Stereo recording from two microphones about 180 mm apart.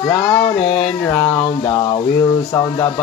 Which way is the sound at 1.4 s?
25° left (ahead or behind).